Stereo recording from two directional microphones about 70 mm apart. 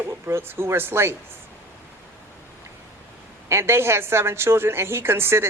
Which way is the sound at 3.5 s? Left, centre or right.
Right.